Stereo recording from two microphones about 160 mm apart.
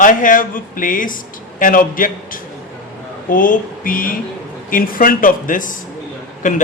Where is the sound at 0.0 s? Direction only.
55° left (ahead or behind).